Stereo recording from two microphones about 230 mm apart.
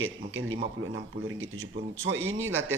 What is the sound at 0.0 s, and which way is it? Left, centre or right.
Speech, right.